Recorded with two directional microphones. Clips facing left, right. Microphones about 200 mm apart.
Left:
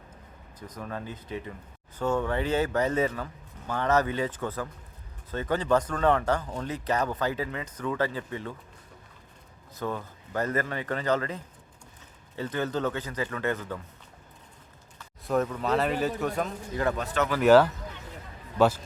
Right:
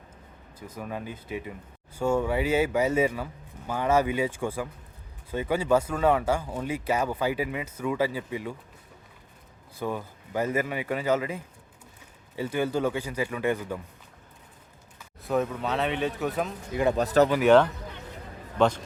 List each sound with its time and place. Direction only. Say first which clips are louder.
0.7 s speech: right 2 dB; 10° right (ahead or behind)
9.7 s speech: right 1 dB; 10° right (ahead or behind)
15.2 s speech: even; centre (ahead or behind)
16.9 s speech: right 11 dB; 35° right (ahead or behind)
17.4 s speech: left 3 dB; 5° left (ahead or behind)